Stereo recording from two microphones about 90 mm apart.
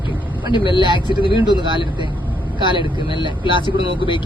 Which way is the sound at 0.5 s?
60° left (ahead or behind).